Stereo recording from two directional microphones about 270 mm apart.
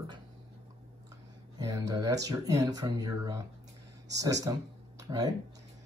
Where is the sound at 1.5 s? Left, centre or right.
Centre.